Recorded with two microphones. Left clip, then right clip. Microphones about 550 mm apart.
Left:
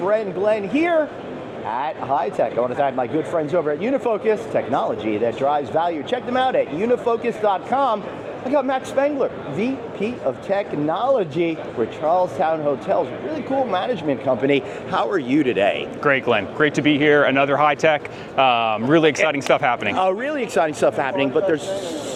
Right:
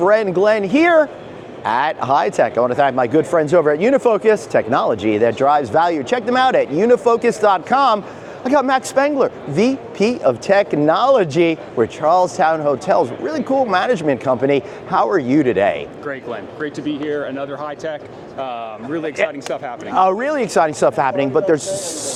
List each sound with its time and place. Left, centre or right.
0.0 s speech: right
8.4 s speech: right
14.8 s speech: right
16.3 s speech: left
19.8 s speech: right